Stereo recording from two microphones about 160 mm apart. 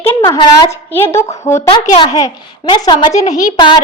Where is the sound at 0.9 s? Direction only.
15° left (ahead or behind).